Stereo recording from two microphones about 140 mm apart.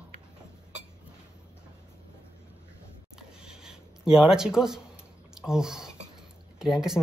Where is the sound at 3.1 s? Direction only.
5° right (ahead or behind).